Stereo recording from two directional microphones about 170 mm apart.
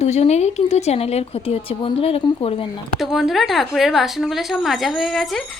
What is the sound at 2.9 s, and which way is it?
Speech, centre (ahead or behind).